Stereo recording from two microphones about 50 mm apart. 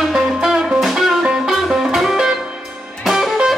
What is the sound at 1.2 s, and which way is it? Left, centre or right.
Music, centre.